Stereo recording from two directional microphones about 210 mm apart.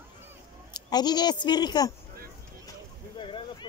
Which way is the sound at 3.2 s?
25° left (ahead or behind).